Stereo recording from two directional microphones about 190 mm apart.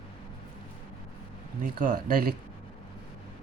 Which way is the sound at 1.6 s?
45° right (ahead or behind).